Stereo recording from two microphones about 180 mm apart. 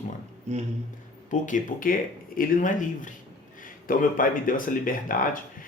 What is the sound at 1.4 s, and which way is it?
Speech, 45° left (ahead or behind).